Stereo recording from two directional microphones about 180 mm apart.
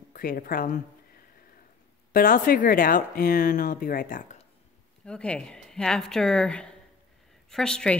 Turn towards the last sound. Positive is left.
turn(degrees=5)  # may be behind; listen again after turning